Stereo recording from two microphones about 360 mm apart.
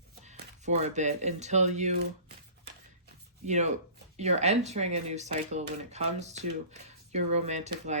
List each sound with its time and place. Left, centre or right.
0.3 s speech: centre
3.4 s speech: centre